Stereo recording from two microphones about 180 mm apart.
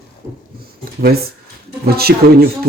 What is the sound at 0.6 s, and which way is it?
Speech, 55° right (ahead or behind).